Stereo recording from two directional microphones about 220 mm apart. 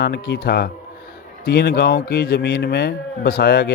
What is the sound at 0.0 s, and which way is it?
A man's voice, 45° left (ahead or behind).